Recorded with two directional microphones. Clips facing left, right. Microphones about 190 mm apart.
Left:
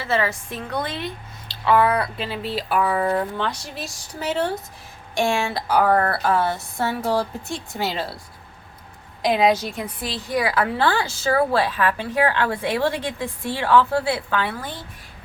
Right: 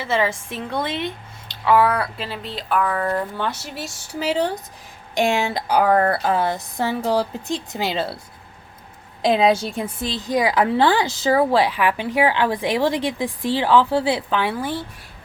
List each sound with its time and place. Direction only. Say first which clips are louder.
0.0 s a woman's voice: right 1 dB; 20° right (ahead or behind)
1.6 s speech: right 1 dB; 10° right (ahead or behind)
3.3 s a woman's voice: right 1 dB; 5° right (ahead or behind)
9.2 s a woman's voice: right 2 dB; 25° right (ahead or behind)